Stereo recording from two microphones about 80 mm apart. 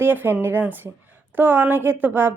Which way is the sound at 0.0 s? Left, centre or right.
Right.